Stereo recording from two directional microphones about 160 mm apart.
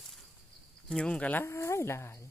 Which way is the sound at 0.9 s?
5° left (ahead or behind).